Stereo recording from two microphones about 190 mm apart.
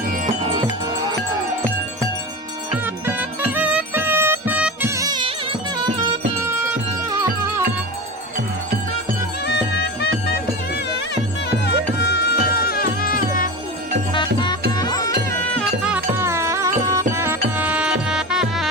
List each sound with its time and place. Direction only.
0.4 s music: 30° right (ahead or behind)
2.7 s music: 10° right (ahead or behind)
9.5 s music: 60° left (ahead or behind)
11.6 s music: 60° left (ahead or behind)
14.1 s music: 25° left (ahead or behind)
15.8 s music: 10° right (ahead or behind)